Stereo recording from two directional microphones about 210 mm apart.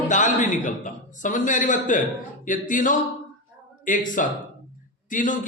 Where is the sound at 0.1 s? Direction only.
35° left (ahead or behind).